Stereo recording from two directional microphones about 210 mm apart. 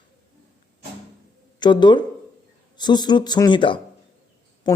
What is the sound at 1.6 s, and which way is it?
Speech, 20° left (ahead or behind).